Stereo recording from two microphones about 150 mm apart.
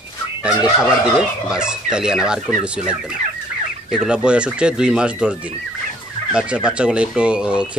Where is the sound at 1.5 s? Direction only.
5° right (ahead or behind).